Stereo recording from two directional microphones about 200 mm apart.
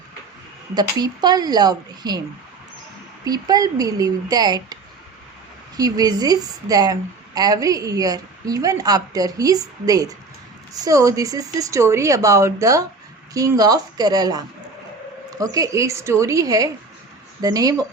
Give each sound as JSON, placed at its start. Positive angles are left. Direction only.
{"t": 0.7, "sound": "a woman's voice", "side_deg": -20}
{"t": 3.2, "sound": "a woman's voice", "side_deg": -20}
{"t": 15.5, "sound": "speech", "side_deg": -15}